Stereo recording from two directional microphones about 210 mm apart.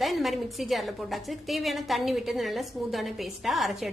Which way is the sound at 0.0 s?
Centre (ahead or behind).